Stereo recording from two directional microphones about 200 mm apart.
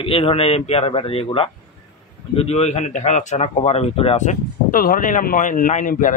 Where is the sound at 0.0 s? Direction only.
30° left (ahead or behind).